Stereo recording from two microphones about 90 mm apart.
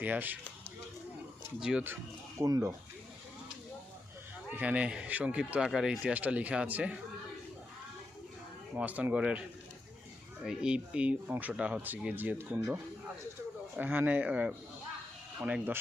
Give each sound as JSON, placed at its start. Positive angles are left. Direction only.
{"t": 0.0, "sound": "speech", "side_deg": -20}
{"t": 2.4, "sound": "speech", "side_deg": -35}
{"t": 4.4, "sound": "speech", "side_deg": -15}
{"t": 8.7, "sound": "speech", "side_deg": -15}
{"t": 10.4, "sound": "speech", "side_deg": -10}
{"t": 13.7, "sound": "speech", "side_deg": -20}